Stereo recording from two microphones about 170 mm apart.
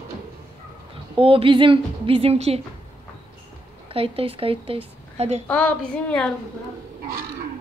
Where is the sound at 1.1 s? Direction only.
30° right (ahead or behind).